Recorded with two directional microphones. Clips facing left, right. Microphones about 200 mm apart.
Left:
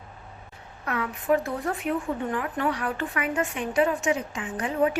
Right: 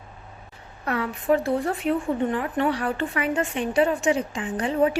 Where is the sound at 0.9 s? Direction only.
35° right (ahead or behind).